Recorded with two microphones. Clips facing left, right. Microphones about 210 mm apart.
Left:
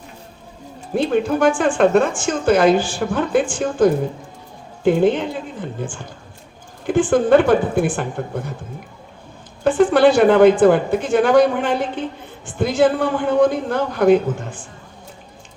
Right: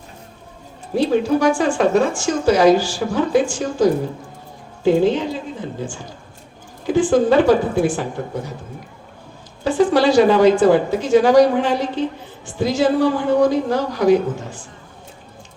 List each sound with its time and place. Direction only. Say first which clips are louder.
0.9 s a woman's voice: right 1 dB; 55° left (ahead or behind)
6.8 s a woman's voice: right 1 dB; 55° left (ahead or behind)
9.6 s a woman's voice: left 2 dB; 55° left (ahead or behind)